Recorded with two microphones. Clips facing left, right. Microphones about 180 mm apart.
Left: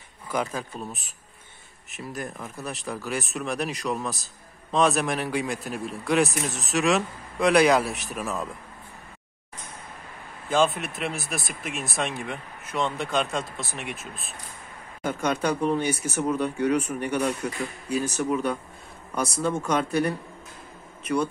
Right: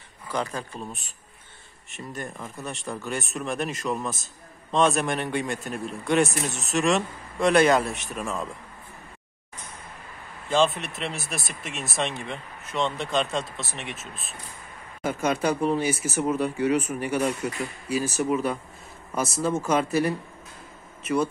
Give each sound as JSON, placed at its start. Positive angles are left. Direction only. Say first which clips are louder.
{"t": 0.3, "sound": "speech", "louder": "left 1 dB", "side_deg": 5}
{"t": 10.5, "sound": "speech", "louder": "even", "side_deg": 0}